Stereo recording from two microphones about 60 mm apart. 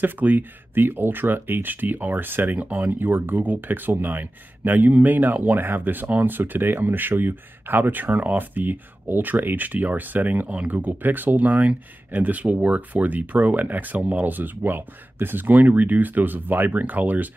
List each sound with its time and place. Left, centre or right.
0.0 s speech: right